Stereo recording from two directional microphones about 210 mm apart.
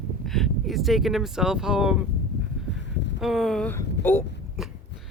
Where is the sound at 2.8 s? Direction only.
55° left (ahead or behind).